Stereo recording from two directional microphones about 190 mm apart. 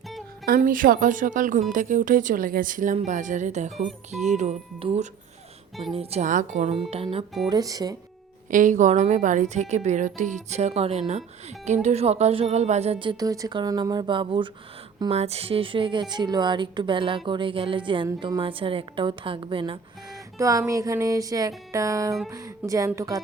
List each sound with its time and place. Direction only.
0.4 s a woman's voice: 50° right (ahead or behind); by 7.3 s 30° right (ahead or behind)
7.5 s speech: 20° right (ahead or behind)
8.4 s a woman's voice: 45° right (ahead or behind); by 19.8 s 25° right (ahead or behind)
20.4 s music: 15° right (ahead or behind)